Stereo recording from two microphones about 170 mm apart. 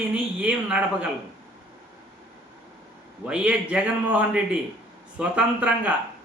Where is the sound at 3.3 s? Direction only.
5° right (ahead or behind).